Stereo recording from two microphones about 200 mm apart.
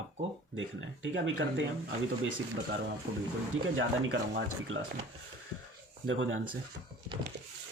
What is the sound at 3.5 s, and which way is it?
Speech, 90° right.